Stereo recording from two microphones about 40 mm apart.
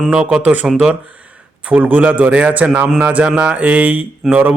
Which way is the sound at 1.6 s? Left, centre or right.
Right.